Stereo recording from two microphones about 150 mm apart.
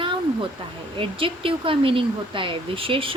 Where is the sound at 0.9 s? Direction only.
35° right (ahead or behind).